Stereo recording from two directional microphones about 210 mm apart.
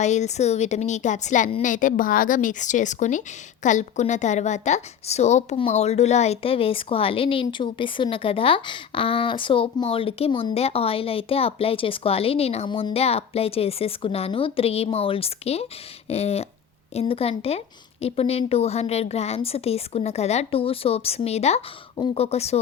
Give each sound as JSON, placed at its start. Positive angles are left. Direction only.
{"t": 0.0, "sound": "a woman's voice", "side_deg": 35}